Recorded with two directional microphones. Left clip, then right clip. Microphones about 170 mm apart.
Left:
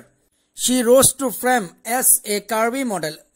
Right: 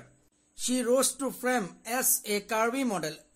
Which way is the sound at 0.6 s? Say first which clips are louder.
Left 12 dB; 45° left (ahead or behind).